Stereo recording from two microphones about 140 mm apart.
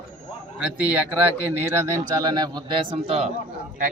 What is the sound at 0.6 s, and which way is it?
Speech, 10° right (ahead or behind).